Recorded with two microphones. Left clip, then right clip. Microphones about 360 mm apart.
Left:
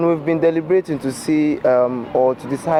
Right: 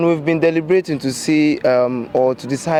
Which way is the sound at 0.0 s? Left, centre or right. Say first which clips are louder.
Right 1 dB; right.